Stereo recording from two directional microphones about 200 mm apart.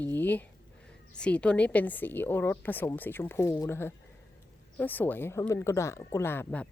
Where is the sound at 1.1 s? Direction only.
5° left (ahead or behind).